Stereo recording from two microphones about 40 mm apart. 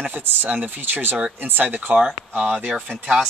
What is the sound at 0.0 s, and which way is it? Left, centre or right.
Speech, right.